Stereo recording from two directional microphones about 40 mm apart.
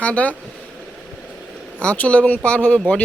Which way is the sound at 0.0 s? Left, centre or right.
Left.